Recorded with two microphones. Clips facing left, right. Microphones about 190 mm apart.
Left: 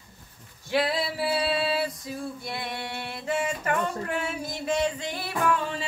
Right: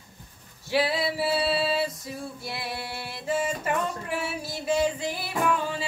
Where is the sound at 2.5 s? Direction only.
5° right (ahead or behind).